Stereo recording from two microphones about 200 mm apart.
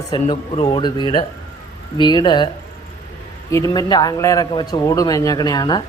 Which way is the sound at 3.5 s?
15° left (ahead or behind).